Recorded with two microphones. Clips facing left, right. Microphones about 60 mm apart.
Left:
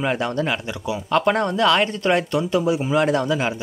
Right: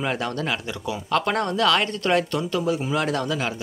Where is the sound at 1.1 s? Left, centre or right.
Centre.